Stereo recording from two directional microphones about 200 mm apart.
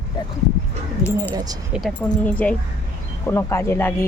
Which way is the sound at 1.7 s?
5° left (ahead or behind).